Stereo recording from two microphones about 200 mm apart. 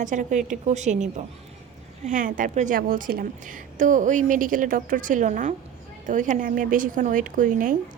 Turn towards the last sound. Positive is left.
turn(degrees=-40)  # may be behind; listen again after turning